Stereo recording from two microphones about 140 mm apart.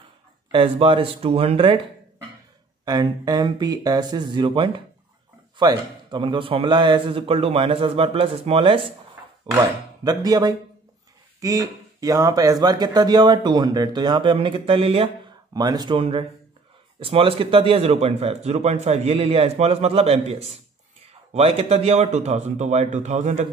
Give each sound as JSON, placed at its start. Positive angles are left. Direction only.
{"t": 0.5, "sound": "a man's voice", "side_deg": -40}
{"t": 2.8, "sound": "a man's voice", "side_deg": -30}
{"t": 9.5, "sound": "speech", "side_deg": -25}
{"t": 15.5, "sound": "a man's voice", "side_deg": -30}